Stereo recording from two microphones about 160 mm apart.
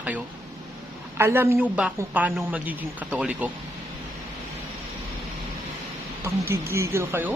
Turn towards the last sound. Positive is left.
turn(degrees=-15)  # may be behind; listen again after turning